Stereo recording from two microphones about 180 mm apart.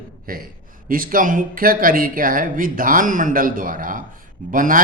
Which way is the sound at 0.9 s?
50° right (ahead or behind).